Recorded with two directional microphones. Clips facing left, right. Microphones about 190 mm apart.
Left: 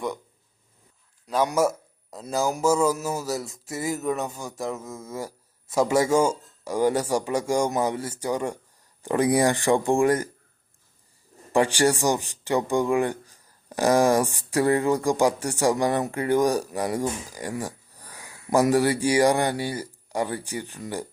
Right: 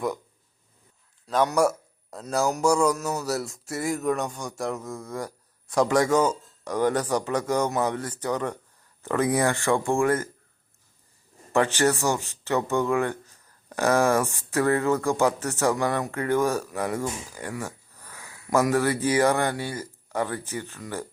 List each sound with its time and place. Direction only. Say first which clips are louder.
1.3 s a man's voice: even; 10° left (ahead or behind)
11.5 s a man's voice: left 1 dB; 10° left (ahead or behind)
17.6 s a sound: left 2 dB; 15° left (ahead or behind)
18.7 s a man's voice: left 2 dB; 15° left (ahead or behind)